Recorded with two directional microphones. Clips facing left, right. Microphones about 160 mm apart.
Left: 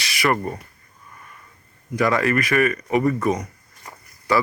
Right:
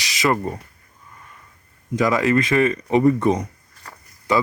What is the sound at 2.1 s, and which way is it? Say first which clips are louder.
Speech: right 4 dB; 20° right (ahead or behind).